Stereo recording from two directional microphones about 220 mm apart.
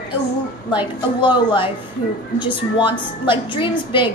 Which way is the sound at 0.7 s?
20° left (ahead or behind).